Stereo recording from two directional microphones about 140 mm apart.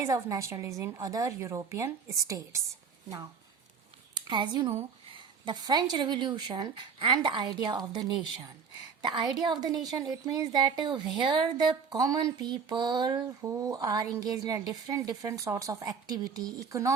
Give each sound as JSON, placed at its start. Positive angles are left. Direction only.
{"t": 0.0, "sound": "a woman's voice", "side_deg": -20}
{"t": 4.1, "sound": "speech", "side_deg": -35}
{"t": 4.7, "sound": "a sound", "side_deg": -50}
{"t": 5.1, "sound": "speech", "side_deg": -35}
{"t": 13.4, "sound": "a woman's voice", "side_deg": -20}